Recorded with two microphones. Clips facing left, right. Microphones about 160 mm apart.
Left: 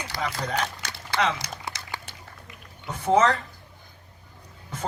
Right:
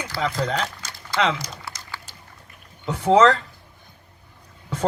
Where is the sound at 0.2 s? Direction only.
75° right (ahead or behind).